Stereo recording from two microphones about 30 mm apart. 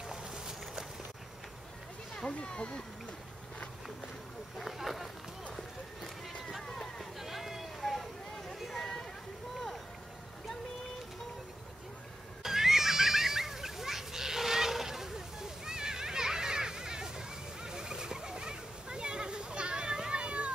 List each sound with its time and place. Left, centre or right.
0.0 s boat: right
2.2 s speech: left
4.6 s speech: centre
7.2 s boat: centre
8.7 s a sound: centre
12.4 s neigh: centre
17.6 s splash: right